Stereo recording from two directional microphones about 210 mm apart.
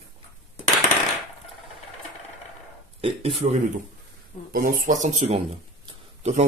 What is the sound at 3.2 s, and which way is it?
Speech, 25° right (ahead or behind).